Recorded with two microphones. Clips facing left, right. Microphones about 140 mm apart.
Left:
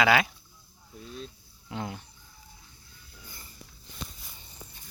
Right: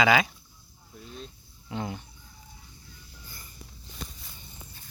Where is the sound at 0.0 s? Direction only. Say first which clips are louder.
Right 1 dB; 5° left (ahead or behind).